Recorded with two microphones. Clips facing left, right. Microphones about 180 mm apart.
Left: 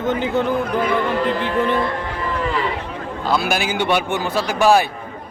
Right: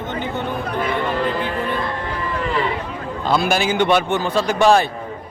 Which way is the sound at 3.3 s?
5° left (ahead or behind).